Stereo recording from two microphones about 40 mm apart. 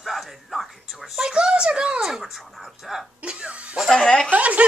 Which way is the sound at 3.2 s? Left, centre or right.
Right.